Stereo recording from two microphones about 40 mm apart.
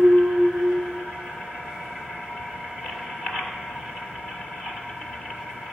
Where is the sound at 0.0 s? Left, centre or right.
Centre.